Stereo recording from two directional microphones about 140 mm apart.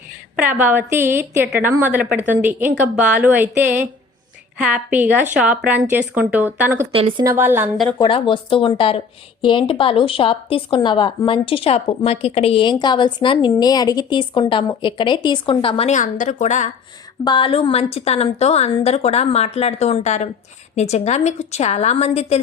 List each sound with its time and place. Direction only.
0.3 s a woman's voice: 10° right (ahead or behind)
7.9 s a woman's voice: 35° left (ahead or behind)
15.9 s speech: 65° left (ahead or behind)
17.2 s a woman's voice: 35° left (ahead or behind)